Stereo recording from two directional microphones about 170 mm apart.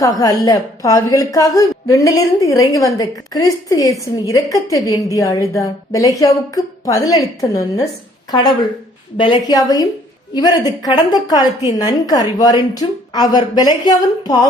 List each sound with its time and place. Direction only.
0.0 s a woman's voice: 20° left (ahead or behind)
9.1 s a woman's voice: 25° left (ahead or behind)